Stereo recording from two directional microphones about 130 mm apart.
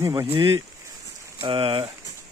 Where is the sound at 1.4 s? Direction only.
45° right (ahead or behind).